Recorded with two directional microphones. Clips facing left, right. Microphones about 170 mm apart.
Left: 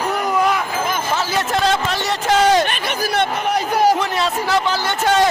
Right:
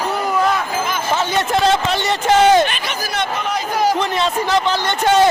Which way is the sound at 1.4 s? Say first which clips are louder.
Right 2 dB; centre (ahead or behind).